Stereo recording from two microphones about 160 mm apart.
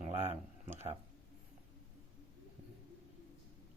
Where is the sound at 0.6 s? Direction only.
45° right (ahead or behind).